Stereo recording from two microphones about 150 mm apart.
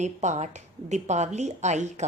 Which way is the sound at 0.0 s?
50° right (ahead or behind).